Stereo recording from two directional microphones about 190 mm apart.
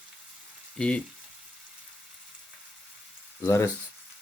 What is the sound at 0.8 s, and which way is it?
Speech, 5° left (ahead or behind).